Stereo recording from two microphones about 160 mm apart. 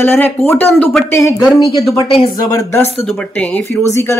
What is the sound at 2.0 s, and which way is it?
Speech, 35° left (ahead or behind).